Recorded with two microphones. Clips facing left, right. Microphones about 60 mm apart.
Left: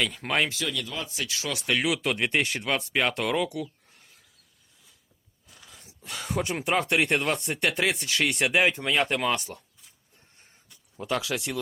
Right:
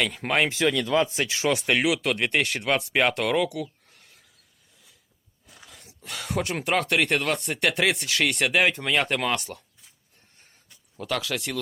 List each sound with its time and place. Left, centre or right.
0.0 s speech: centre
0.6 s speech: right
1.5 s speech: right
1.7 s speech: centre
5.6 s speech: centre
10.9 s speech: left